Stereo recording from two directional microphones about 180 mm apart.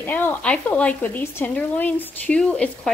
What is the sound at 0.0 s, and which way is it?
Speech, 10° left (ahead or behind).